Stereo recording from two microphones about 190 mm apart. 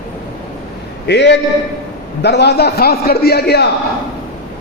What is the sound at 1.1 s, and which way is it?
A man's voice, 65° left (ahead or behind).